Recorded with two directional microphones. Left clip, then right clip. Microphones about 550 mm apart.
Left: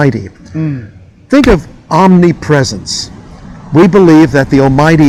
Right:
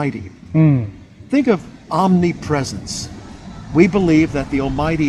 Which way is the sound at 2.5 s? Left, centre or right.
Left.